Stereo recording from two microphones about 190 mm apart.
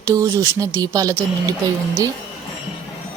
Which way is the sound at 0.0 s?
15° right (ahead or behind).